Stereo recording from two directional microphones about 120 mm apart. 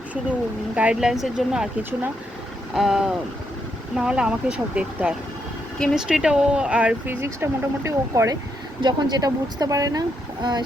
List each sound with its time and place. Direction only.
0.8 s speech: 5° right (ahead or behind)
2.7 s speech: 5° right (ahead or behind); by 8.4 s 25° right (ahead or behind)
8.8 s speech: 35° right (ahead or behind)